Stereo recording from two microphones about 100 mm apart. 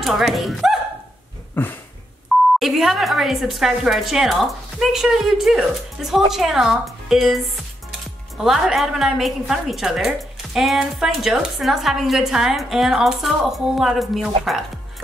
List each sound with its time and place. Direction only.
0.0 s a woman's voice: centre (ahead or behind)
1.5 s a sound: 20° left (ahead or behind)
2.3 s beep: centre (ahead or behind)
2.6 s a woman's voice: 5° right (ahead or behind)